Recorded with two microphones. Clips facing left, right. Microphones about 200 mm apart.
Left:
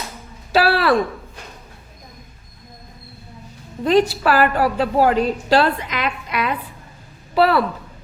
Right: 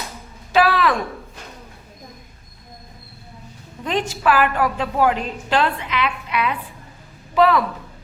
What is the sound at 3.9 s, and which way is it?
A woman's voice, 40° left (ahead or behind).